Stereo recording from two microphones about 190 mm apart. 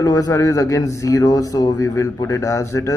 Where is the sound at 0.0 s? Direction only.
20° left (ahead or behind).